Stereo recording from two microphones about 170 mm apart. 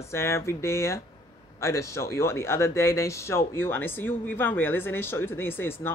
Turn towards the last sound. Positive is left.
turn(degrees=10)  # may be behind; listen again after turning